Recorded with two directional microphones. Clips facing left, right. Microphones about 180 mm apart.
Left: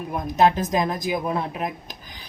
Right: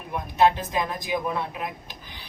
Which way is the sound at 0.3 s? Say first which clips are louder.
Left 2 dB; 40° left (ahead or behind).